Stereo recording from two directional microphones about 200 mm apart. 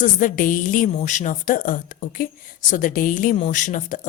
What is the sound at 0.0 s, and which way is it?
A woman's voice, 40° left (ahead or behind).